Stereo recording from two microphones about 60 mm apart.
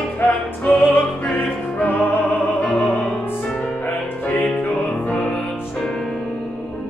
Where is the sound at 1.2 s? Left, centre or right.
Left.